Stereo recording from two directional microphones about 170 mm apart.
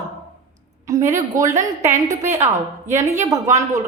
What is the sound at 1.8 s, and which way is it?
A woman's voice, 45° right (ahead or behind).